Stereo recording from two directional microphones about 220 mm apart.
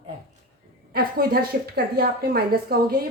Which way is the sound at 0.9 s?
45° right (ahead or behind).